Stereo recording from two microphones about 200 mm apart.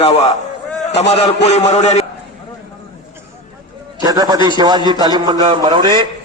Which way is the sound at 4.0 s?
20° right (ahead or behind).